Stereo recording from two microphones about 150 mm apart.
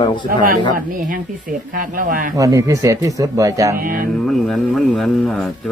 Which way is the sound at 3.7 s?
70° right (ahead or behind).